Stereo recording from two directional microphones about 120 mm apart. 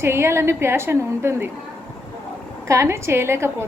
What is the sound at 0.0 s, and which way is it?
A woman's voice, 20° right (ahead or behind).